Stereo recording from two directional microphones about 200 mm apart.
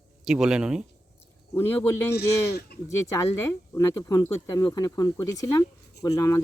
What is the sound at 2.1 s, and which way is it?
Speech, 50° left (ahead or behind).